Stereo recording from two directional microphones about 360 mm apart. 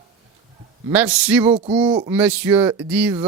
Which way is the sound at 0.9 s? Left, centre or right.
Centre.